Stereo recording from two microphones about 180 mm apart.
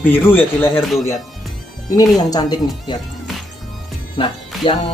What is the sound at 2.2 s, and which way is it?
Speech, 20° left (ahead or behind).